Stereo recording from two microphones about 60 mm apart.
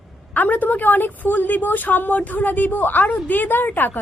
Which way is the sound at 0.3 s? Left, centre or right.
Left.